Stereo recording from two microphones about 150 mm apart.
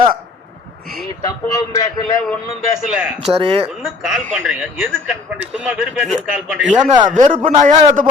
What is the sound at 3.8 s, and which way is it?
A man's voice, 5° right (ahead or behind).